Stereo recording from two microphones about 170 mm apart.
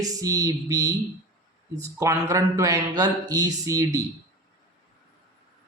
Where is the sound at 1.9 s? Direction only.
15° right (ahead or behind).